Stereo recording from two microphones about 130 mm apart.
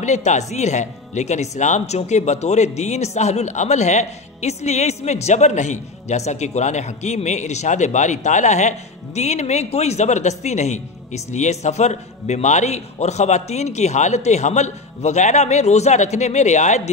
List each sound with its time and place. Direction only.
0.0 s speech: 65° left (ahead or behind)